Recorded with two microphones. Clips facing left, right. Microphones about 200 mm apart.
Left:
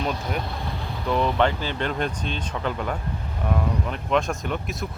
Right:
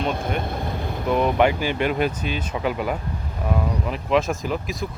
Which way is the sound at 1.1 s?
10° right (ahead or behind).